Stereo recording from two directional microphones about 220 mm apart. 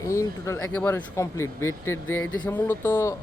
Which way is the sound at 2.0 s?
70° left (ahead or behind).